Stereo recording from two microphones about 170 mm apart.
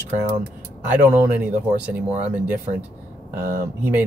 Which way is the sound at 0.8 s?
10° right (ahead or behind).